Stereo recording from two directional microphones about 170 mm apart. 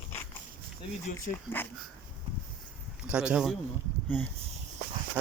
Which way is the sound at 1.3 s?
10° left (ahead or behind).